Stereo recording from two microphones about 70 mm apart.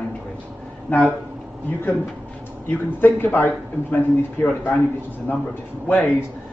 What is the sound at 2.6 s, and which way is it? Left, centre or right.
Speech, left.